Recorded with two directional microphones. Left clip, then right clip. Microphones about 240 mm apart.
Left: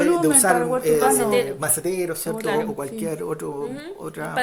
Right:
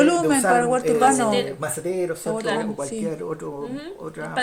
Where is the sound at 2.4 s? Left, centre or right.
Centre.